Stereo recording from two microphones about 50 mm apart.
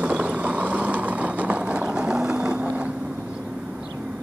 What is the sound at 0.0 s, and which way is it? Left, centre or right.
Vehicle, right.